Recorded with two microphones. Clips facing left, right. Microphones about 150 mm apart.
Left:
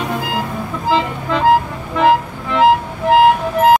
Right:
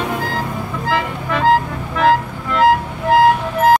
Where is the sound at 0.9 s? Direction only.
20° left (ahead or behind).